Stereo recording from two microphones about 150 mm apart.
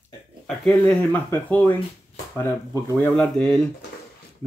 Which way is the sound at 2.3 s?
20° left (ahead or behind).